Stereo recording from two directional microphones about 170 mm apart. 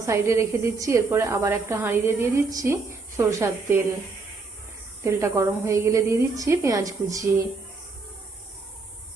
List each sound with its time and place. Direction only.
0.0 s a woman's voice: 15° right (ahead or behind)
5.0 s a woman's voice: 15° right (ahead or behind)